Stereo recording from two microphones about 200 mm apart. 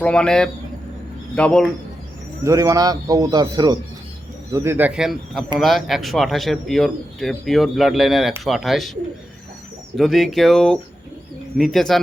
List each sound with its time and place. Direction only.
0.0 s a man's voice: 5° left (ahead or behind)
2.4 s a man's voice: 15° right (ahead or behind); by 8.9 s centre (ahead or behind)
10.0 s a man's voice: centre (ahead or behind)